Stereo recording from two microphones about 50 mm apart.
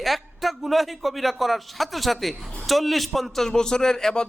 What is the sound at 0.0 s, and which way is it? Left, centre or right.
A man's voice, centre.